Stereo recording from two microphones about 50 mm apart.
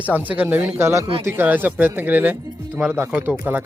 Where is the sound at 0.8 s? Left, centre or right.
Right.